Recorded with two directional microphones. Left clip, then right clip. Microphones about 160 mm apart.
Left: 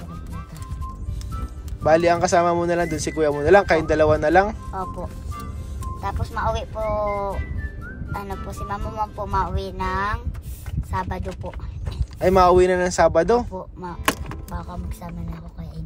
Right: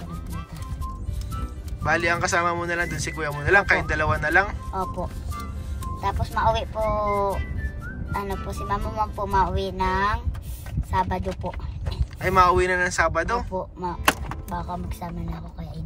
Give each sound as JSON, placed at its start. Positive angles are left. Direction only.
{"t": 1.8, "sound": "speech", "side_deg": 25}
{"t": 4.7, "sound": "music", "side_deg": 0}
{"t": 5.9, "sound": "speech", "side_deg": 5}
{"t": 12.2, "sound": "speech", "side_deg": 25}
{"t": 13.5, "sound": "speech", "side_deg": 5}